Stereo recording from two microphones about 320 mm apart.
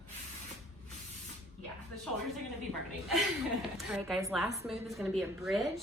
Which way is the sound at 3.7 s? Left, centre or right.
Centre.